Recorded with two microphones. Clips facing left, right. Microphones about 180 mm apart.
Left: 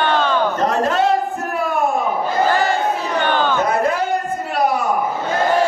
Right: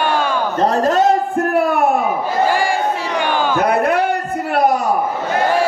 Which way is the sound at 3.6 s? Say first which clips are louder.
Right 3 dB; 65° right (ahead or behind).